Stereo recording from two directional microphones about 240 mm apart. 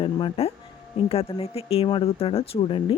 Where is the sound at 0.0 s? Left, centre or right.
Left.